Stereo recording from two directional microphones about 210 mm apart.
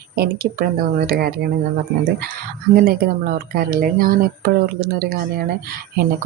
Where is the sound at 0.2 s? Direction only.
45° right (ahead or behind).